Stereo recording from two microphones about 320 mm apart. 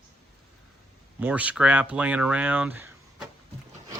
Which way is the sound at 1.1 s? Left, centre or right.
Centre.